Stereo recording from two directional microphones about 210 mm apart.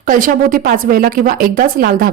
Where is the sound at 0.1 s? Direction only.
40° right (ahead or behind).